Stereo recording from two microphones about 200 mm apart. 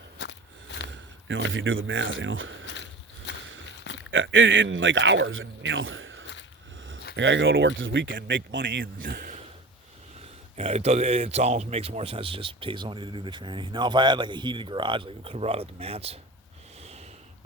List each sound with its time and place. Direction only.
0.2 s a sound: 60° left (ahead or behind)
1.3 s speech: 70° right (ahead or behind)
3.3 s walk: 60° left (ahead or behind)
4.1 s speech: 70° right (ahead or behind)
9.0 s speech: 45° right (ahead or behind)
10.2 s speech: 30° right (ahead or behind)